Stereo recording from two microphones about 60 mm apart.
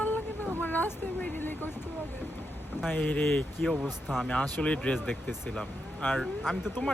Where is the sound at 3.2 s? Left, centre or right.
Centre.